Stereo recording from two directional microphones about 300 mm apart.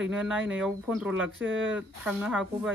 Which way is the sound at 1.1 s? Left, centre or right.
Right.